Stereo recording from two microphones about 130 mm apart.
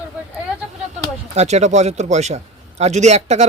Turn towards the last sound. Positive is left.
turn(degrees=-60)  # may be behind; listen again after turning